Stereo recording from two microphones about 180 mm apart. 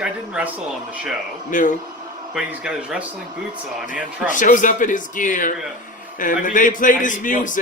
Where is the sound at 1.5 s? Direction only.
45° left (ahead or behind).